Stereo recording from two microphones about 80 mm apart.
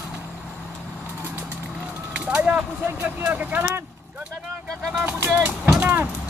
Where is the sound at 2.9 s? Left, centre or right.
Centre.